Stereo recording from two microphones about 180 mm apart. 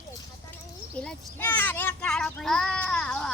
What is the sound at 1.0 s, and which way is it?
A child's voice, 5° left (ahead or behind).